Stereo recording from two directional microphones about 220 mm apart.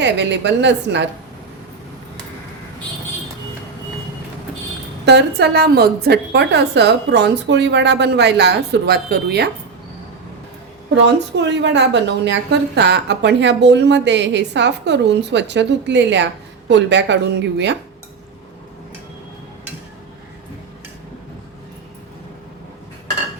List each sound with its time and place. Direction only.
0.0 s a woman's voice: 55° right (ahead or behind)
5.0 s a woman's voice: 50° right (ahead or behind)
11.0 s a woman's voice: 50° right (ahead or behind)